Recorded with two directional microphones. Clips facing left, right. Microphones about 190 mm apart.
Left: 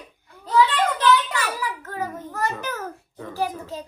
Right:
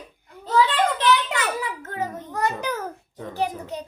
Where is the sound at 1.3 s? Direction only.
25° right (ahead or behind).